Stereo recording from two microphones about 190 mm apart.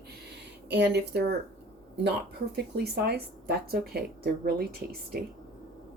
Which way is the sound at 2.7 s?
55° right (ahead or behind).